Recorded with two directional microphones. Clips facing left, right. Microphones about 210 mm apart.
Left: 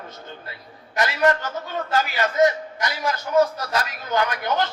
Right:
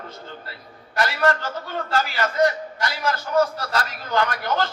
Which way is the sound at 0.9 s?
20° left (ahead or behind).